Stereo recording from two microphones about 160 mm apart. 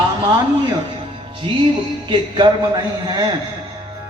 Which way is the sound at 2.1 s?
30° right (ahead or behind).